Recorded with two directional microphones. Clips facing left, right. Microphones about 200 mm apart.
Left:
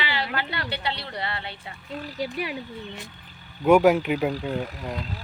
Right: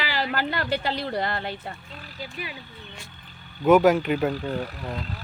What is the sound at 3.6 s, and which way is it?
Speech, 5° left (ahead or behind).